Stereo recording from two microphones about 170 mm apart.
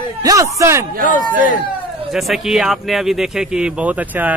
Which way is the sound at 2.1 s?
Centre (ahead or behind).